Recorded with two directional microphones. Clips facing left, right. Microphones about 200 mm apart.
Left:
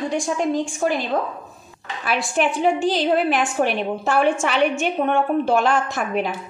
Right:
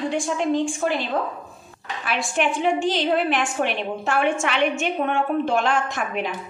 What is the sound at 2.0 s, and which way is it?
A woman's voice, 40° left (ahead or behind).